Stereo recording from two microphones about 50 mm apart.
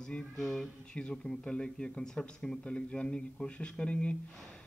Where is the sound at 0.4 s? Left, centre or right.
Centre.